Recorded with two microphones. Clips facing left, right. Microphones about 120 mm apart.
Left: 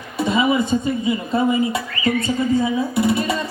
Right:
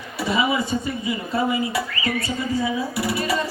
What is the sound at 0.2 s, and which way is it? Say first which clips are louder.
Speech: left 4 dB; 25° left (ahead or behind).